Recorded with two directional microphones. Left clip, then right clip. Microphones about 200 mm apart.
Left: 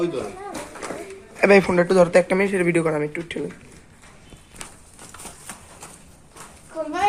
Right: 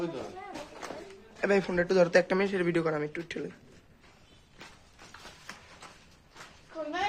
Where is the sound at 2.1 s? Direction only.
20° right (ahead or behind).